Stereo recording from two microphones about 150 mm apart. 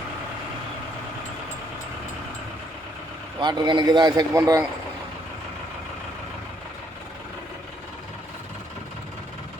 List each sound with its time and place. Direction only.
3.4 s speech: 30° right (ahead or behind)